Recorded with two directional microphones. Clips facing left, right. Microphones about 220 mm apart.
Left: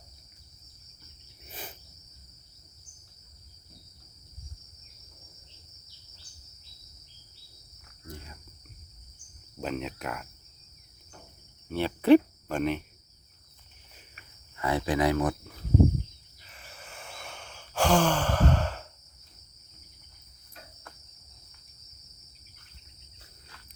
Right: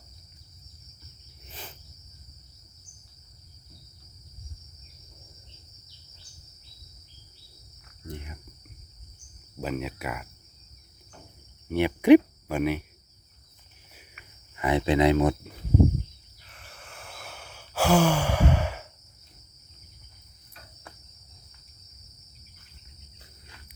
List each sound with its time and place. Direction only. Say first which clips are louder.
1.5 s cricket: left 1 dB; 15° left (ahead or behind)
8.0 s cricket: right 5 dB; 20° right (ahead or behind)
9.6 s cricket: right 2 dB; 5° right (ahead or behind)
11.7 s speech: right 3 dB; 15° right (ahead or behind)
14.5 s speech: right 4 dB; 20° right (ahead or behind)
16.4 s sigh: even; centre (ahead or behind)